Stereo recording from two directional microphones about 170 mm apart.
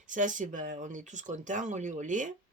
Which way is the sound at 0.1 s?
50° right (ahead or behind).